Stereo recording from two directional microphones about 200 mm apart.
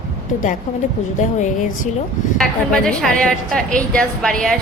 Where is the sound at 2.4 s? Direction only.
5° left (ahead or behind).